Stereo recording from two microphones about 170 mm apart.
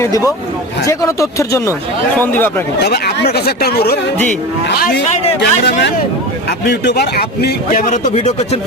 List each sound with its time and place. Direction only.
0.9 s speech: 20° left (ahead or behind)
2.7 s speech: 70° left (ahead or behind)
5.4 s speech: 90° left
6.7 s a man's voice: 75° left (ahead or behind); by 7.9 s 55° left (ahead or behind)
8.1 s speech: 40° left (ahead or behind)